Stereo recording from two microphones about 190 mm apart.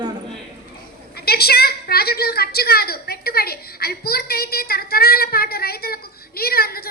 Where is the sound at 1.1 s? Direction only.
55° left (ahead or behind).